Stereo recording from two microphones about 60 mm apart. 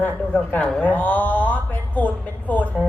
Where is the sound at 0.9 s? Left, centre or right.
Left.